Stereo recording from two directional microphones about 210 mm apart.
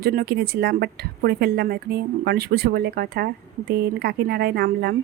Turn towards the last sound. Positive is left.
turn(degrees=-50)  # may be behind; listen again after turning